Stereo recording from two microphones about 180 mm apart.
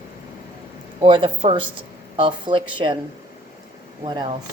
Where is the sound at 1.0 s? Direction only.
30° right (ahead or behind).